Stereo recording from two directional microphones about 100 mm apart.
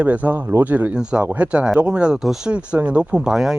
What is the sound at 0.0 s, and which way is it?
Speech, 15° right (ahead or behind).